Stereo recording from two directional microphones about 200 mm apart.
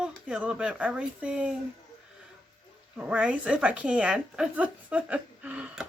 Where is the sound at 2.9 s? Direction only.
5° right (ahead or behind).